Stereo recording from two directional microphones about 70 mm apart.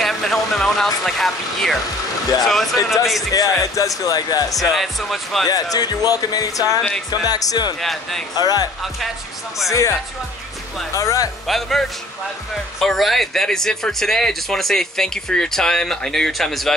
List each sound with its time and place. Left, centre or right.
0.0 s music: centre
1.0 s speech: centre
3.3 s speech: left
4.5 s speech: centre
5.5 s speech: left
7.8 s speech: centre
8.4 s speech: left
9.7 s speech: left
11.0 s speech: left
11.4 s speech: centre
12.8 s speech: centre